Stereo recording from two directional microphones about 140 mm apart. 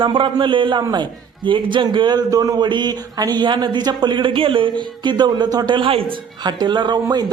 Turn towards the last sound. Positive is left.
turn(degrees=-30)  # may be behind; listen again after turning